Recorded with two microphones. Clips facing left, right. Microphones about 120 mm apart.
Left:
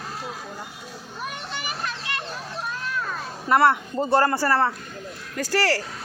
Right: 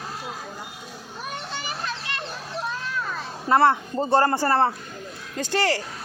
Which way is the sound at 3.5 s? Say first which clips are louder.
Even; 30° right (ahead or behind).